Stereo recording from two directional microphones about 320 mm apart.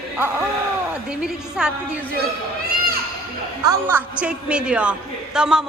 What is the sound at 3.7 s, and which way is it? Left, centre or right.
A woman's voice, centre.